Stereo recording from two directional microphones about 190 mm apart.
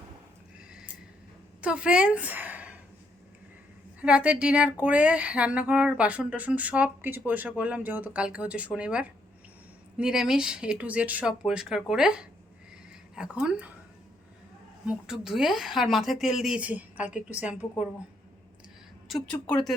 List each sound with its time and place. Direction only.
1.6 s a woman's voice: 5° right (ahead or behind)
4.0 s a woman's voice: 5° right (ahead or behind)
14.8 s a woman's voice: 5° right (ahead or behind)
19.0 s a woman's voice: 5° left (ahead or behind)